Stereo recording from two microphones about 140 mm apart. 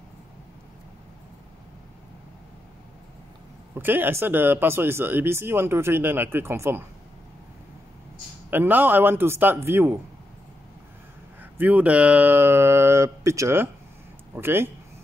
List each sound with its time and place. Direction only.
3.7 s speech: 15° right (ahead or behind)
8.5 s speech: 15° right (ahead or behind)
11.5 s speech: 10° right (ahead or behind)